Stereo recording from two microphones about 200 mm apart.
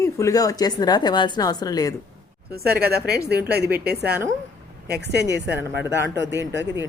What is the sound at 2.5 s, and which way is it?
Speech, 50° right (ahead or behind).